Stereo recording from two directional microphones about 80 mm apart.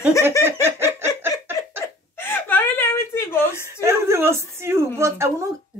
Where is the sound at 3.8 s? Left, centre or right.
Right.